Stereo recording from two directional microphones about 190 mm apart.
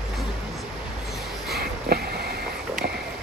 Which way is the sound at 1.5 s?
55° right (ahead or behind).